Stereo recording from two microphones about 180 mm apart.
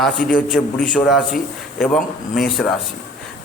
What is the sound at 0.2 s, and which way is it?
Speech, 50° left (ahead or behind).